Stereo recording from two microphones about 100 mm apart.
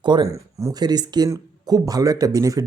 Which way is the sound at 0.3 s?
30° right (ahead or behind).